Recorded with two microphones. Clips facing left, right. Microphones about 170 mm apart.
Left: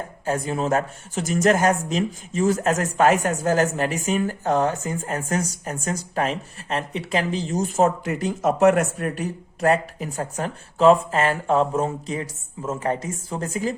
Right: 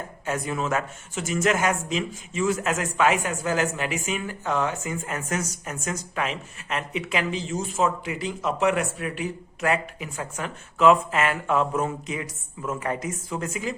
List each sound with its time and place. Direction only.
0.3 s speech: 35° left (ahead or behind)